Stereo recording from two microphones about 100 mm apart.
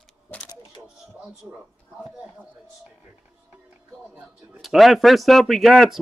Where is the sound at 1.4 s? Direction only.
5° right (ahead or behind).